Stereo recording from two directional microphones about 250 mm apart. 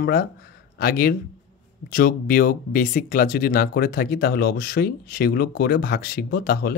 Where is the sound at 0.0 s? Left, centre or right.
Left.